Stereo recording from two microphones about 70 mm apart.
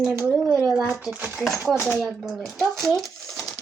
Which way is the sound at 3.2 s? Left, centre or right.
Centre.